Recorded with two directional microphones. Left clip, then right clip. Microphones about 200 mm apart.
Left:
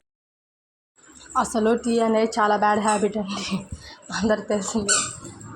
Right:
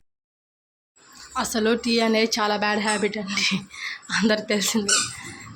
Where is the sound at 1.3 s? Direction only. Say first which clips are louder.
Left 2 dB; 5° left (ahead or behind).